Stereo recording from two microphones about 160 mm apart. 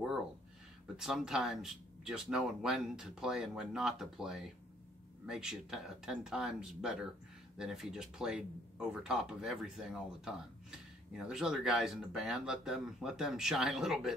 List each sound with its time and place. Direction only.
0.9 s speech: 5° right (ahead or behind)